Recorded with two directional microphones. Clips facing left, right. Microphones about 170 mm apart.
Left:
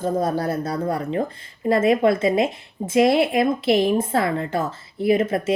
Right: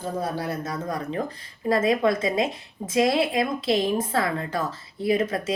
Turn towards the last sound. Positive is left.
turn(degrees=25)  # may be behind; listen again after turning